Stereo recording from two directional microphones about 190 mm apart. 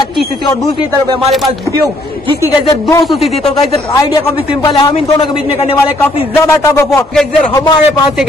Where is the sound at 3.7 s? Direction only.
20° left (ahead or behind).